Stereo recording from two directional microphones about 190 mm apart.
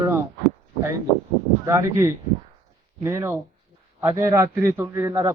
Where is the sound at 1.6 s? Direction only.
15° right (ahead or behind).